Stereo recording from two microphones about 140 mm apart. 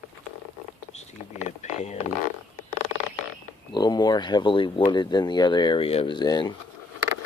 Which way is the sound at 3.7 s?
30° left (ahead or behind).